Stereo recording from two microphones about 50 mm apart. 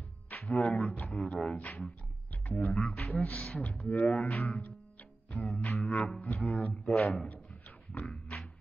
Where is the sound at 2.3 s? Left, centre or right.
Left.